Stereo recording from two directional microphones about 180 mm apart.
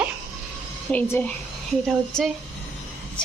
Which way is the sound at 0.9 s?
10° left (ahead or behind).